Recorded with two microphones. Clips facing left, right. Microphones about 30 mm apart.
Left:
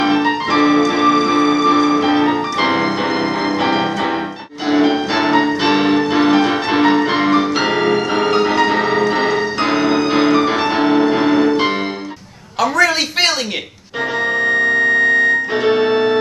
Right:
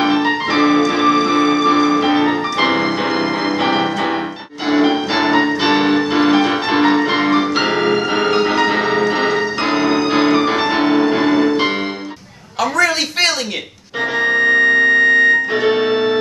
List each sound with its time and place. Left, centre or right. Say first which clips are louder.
0.0 s music: even; centre
4.6 s music: even; centre
12.5 s a sound: left 1 dB; centre
14.1 s music: right 3 dB; centre
15.6 s organ: left 1 dB; centre